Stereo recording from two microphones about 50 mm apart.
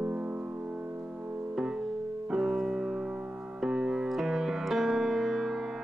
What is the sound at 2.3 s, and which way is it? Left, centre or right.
Music, centre.